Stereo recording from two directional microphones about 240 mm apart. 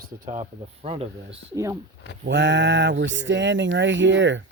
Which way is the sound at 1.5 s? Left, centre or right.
Centre.